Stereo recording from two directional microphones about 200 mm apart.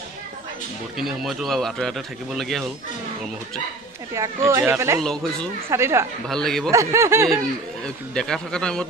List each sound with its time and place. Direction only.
0.9 s speech: centre (ahead or behind)
4.1 s speech: 15° right (ahead or behind)
5.0 s speech: 5° left (ahead or behind)
5.7 s speech: 15° right (ahead or behind)
6.2 s speech: centre (ahead or behind)
6.7 s speech: 15° right (ahead or behind)
7.8 s speech: 5° left (ahead or behind)